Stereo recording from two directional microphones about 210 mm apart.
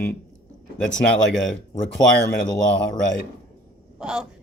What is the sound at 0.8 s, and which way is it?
Speech, 60° left (ahead or behind).